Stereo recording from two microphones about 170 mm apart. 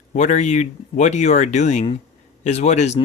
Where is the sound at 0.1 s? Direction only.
45° left (ahead or behind).